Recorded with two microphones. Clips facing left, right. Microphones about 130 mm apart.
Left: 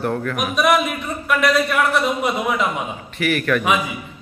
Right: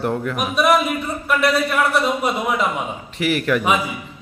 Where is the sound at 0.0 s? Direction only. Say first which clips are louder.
Even; 20° right (ahead or behind).